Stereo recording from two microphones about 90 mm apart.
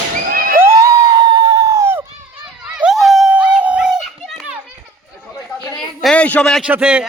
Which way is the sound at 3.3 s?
10° right (ahead or behind).